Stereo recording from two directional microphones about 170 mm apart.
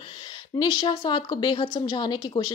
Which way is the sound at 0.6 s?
25° left (ahead or behind).